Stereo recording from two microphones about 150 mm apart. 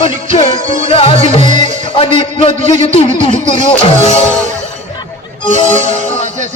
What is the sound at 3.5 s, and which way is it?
Music, 45° left (ahead or behind).